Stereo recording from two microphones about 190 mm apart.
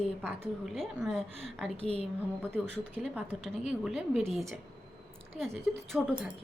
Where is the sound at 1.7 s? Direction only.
30° right (ahead or behind).